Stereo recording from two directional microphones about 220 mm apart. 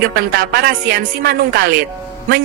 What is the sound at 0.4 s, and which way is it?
A man's voice, 45° right (ahead or behind).